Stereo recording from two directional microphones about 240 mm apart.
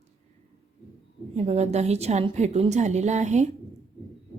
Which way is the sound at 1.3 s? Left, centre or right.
Right.